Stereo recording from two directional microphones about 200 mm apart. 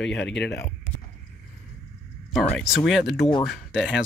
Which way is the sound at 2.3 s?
Centre (ahead or behind).